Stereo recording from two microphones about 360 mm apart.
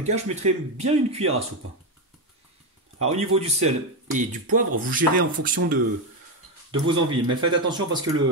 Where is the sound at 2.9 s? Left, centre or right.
Centre.